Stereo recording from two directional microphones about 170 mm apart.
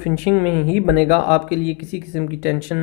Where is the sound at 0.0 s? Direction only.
5° right (ahead or behind).